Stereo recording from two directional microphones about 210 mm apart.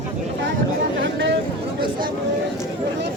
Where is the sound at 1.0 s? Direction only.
55° right (ahead or behind).